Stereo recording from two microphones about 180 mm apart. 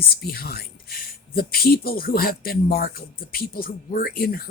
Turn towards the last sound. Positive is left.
turn(degrees=55)  # may be behind; listen again after turning